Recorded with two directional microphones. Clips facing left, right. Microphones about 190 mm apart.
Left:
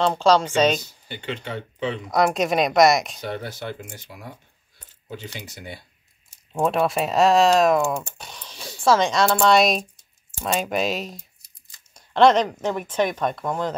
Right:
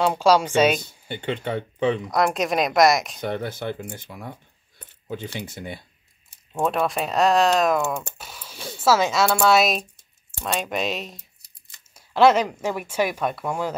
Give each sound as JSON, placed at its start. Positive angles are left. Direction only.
{"t": 0.0, "sound": "speech", "side_deg": -10}
{"t": 0.7, "sound": "speech", "side_deg": -55}
{"t": 2.0, "sound": "speech", "side_deg": 0}
{"t": 3.2, "sound": "speech", "side_deg": -55}
{"t": 6.6, "sound": "speech", "side_deg": 0}
{"t": 11.9, "sound": "a sound", "side_deg": -5}
{"t": 12.6, "sound": "speech", "side_deg": -10}